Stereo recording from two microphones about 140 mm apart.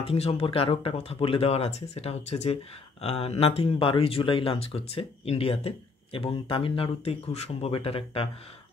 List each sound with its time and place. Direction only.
0.0 s speech: 45° left (ahead or behind)